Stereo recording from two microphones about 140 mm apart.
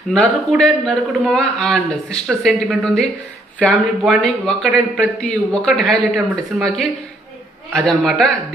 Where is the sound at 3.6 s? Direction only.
5° left (ahead or behind).